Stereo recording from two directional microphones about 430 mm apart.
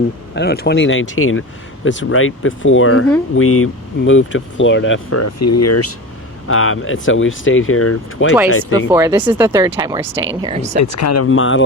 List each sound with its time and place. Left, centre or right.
0.3 s speech: left
8.9 s speech: centre
11.0 s speech: left